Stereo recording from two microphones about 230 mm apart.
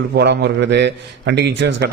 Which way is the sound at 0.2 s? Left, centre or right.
Right.